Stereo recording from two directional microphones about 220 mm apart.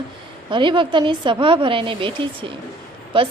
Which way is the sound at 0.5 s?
20° right (ahead or behind).